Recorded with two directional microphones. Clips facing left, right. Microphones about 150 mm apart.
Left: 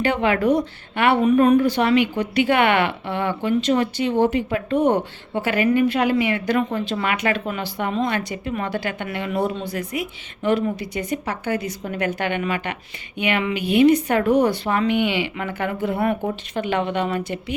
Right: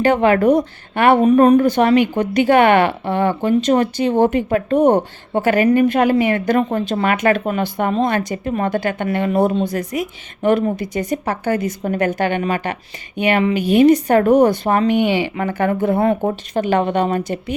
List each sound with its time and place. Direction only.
0.0 s speech: 45° right (ahead or behind)